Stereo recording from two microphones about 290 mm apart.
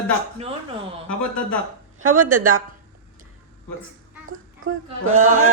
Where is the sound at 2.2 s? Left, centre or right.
Right.